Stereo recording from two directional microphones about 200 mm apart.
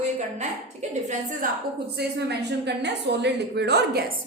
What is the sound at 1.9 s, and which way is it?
A woman's voice, 55° right (ahead or behind).